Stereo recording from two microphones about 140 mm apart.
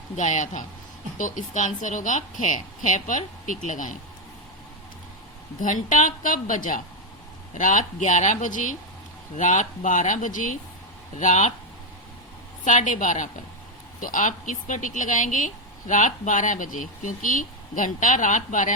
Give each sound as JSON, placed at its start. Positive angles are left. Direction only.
{"t": 0.2, "sound": "a woman's voice", "side_deg": 60}
{"t": 5.5, "sound": "a woman's voice", "side_deg": 65}
{"t": 12.6, "sound": "a woman's voice", "side_deg": 60}